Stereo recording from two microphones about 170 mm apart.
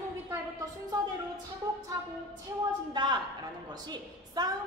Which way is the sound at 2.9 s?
25° right (ahead or behind).